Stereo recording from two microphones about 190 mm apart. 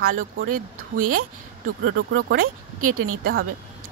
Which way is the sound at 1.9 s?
55° right (ahead or behind).